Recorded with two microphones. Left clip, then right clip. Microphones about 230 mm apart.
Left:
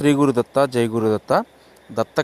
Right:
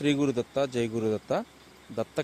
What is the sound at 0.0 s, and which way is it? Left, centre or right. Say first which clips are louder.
Speech: left 9 dB; left.